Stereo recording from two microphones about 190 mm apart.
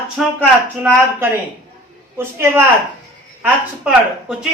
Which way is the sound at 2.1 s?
10° right (ahead or behind).